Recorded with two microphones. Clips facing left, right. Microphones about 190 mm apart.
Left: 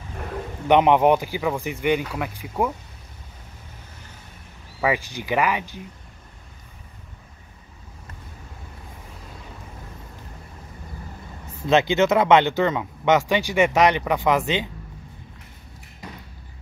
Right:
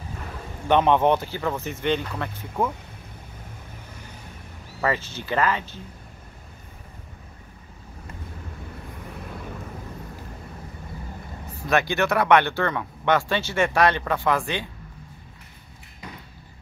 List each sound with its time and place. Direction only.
0.7 s speech: 15° left (ahead or behind)
4.8 s speech: 15° left (ahead or behind)
11.6 s speech: 20° left (ahead or behind)